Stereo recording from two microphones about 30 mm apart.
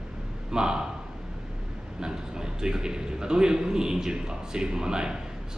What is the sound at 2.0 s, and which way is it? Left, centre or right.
A man's voice, right.